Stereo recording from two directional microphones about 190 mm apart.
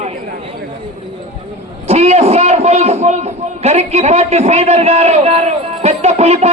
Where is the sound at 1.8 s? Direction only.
35° right (ahead or behind).